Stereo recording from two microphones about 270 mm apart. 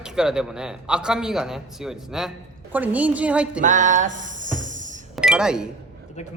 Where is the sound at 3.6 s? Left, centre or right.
Right.